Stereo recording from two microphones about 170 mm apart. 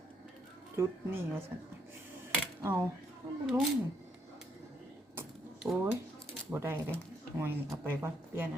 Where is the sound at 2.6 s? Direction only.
15° right (ahead or behind).